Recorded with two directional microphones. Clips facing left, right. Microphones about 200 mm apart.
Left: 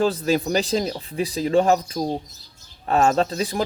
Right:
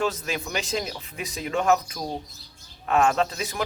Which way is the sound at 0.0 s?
35° left (ahead or behind).